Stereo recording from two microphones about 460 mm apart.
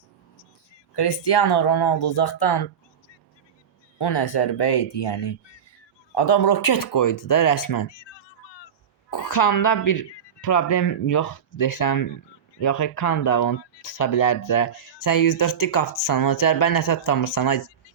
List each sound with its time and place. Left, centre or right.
0.9 s speech: left
3.9 s speech: left
9.0 s speech: left